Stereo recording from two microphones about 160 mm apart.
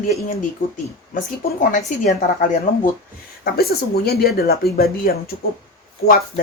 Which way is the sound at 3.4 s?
75° left (ahead or behind).